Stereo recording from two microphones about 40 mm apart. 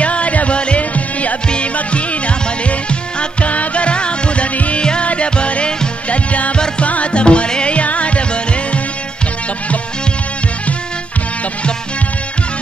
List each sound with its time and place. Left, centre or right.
0.0 s music: left